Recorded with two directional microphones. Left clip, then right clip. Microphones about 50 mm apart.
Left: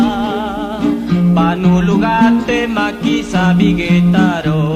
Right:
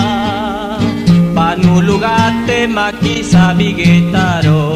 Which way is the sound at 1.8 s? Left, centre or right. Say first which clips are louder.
Right 1 dB; left.